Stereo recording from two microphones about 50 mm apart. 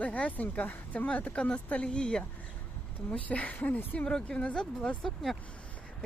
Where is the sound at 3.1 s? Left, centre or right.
Left.